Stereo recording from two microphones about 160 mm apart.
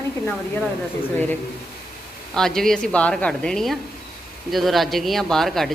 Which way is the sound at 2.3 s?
5° left (ahead or behind).